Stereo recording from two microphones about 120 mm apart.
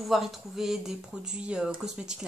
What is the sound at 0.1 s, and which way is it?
Speech, 5° right (ahead or behind).